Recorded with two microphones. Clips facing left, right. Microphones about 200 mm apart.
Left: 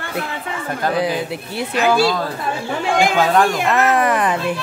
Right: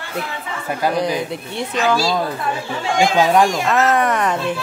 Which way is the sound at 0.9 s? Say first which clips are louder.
Left 1 dB; 5° left (ahead or behind).